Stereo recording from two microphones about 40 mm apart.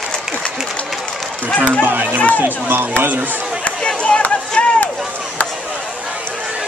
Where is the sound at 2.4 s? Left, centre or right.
Right.